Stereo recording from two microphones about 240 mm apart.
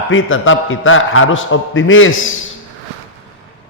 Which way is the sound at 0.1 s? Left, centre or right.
Left.